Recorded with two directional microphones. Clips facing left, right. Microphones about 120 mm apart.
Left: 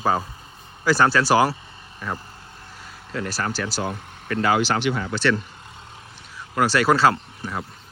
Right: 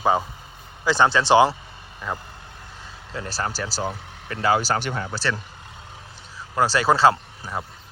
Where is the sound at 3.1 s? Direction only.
25° right (ahead or behind).